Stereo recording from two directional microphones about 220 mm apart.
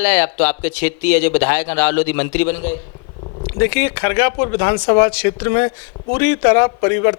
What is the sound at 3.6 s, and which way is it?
Speech, 15° left (ahead or behind).